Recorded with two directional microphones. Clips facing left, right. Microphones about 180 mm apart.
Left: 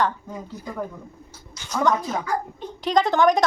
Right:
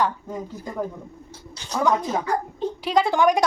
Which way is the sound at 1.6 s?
30° right (ahead or behind).